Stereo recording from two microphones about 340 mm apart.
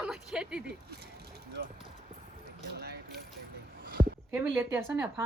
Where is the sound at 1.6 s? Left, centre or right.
Right.